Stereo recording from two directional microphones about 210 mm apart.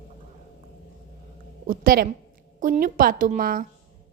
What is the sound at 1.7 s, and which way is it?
A woman's voice, 45° right (ahead or behind).